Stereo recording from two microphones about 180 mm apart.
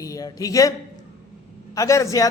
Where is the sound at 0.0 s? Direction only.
20° left (ahead or behind).